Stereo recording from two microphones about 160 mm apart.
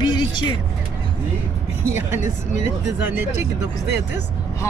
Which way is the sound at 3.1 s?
15° right (ahead or behind).